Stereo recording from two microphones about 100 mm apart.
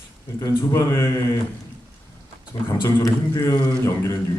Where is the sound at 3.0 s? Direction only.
30° left (ahead or behind).